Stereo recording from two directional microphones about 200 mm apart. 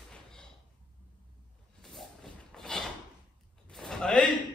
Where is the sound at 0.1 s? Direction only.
5° left (ahead or behind).